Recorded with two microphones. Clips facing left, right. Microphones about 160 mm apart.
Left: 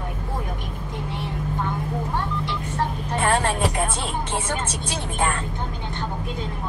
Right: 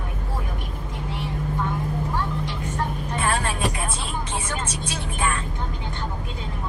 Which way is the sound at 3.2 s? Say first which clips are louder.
Left 4 dB; 60° left (ahead or behind).